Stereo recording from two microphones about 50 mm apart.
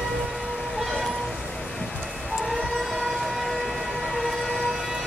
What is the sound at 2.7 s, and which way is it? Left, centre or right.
Vehicle, centre.